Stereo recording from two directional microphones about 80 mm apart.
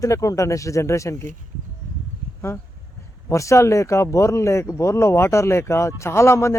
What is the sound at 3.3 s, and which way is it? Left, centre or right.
Speech, left.